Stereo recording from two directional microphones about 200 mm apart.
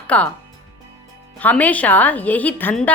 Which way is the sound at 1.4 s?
5° left (ahead or behind).